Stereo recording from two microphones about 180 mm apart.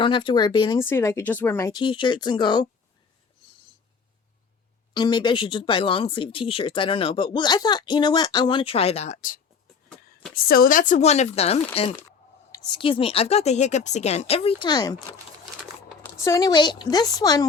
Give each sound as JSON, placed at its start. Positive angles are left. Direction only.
{"t": 0.0, "sound": "speech", "side_deg": 25}
{"t": 0.8, "sound": "speech", "side_deg": 15}
{"t": 4.9, "sound": "speech", "side_deg": 25}
{"t": 10.3, "sound": "speech", "side_deg": 55}
{"t": 16.1, "sound": "speech", "side_deg": 15}